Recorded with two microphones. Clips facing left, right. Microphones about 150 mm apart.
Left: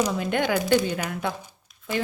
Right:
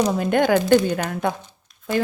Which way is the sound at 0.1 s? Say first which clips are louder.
Right 6 dB; 45° right (ahead or behind).